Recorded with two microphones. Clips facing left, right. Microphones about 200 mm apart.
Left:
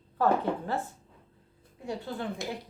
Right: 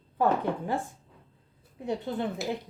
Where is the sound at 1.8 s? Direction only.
20° right (ahead or behind).